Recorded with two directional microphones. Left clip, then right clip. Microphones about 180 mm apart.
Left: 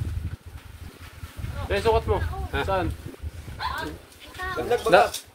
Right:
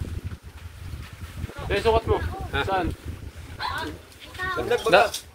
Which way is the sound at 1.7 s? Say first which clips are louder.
Right 1 dB; 30° right (ahead or behind).